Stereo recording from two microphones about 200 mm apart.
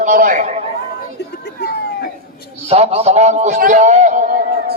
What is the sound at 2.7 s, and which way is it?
A man's voice, 30° right (ahead or behind).